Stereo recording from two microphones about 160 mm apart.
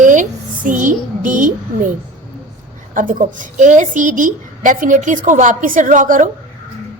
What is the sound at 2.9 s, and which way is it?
A woman's voice, 55° right (ahead or behind).